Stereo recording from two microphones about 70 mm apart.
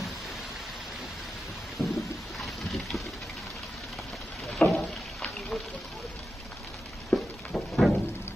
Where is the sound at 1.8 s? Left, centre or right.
Centre.